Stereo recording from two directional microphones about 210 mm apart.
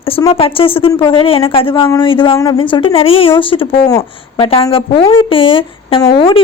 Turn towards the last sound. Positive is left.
turn(degrees=25)  # may be behind; listen again after turning